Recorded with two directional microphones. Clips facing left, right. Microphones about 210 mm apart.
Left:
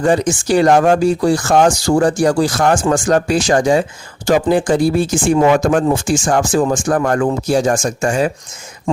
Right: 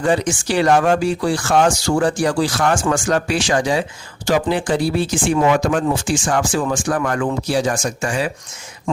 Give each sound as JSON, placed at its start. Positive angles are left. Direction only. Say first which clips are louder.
{"t": 0.0, "sound": "speech", "louder": "left 4 dB", "side_deg": 45}